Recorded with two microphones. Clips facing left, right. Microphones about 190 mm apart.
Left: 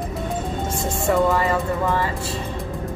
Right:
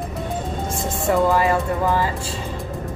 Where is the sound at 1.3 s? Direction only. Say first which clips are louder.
Right 2 dB; 20° right (ahead or behind).